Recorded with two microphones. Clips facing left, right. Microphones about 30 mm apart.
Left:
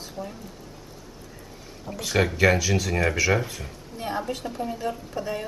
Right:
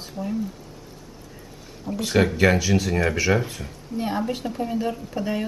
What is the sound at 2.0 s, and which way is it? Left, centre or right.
Speech, centre.